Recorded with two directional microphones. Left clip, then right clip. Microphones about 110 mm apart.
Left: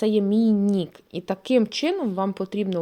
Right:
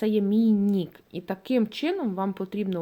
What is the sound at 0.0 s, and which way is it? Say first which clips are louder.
A woman's voice: left 3 dB; 30° left (ahead or behind).